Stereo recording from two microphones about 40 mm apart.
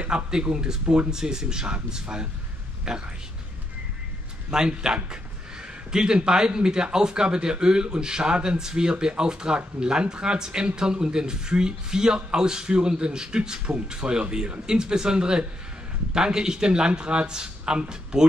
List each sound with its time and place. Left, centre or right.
0.0 s speech: right
4.5 s speech: centre